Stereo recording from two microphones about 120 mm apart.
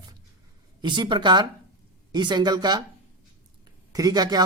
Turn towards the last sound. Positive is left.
turn(degrees=-35)  # may be behind; listen again after turning